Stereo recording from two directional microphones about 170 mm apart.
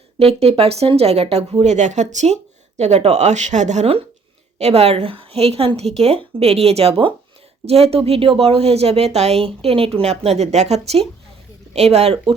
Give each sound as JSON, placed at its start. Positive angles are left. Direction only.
{"t": 0.2, "sound": "speech", "side_deg": -35}